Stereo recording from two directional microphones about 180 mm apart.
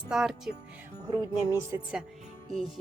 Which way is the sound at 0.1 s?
Centre (ahead or behind).